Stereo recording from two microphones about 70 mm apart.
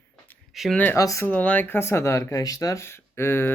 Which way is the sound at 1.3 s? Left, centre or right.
Left.